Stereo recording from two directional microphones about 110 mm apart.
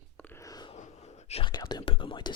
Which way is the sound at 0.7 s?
75° left (ahead or behind).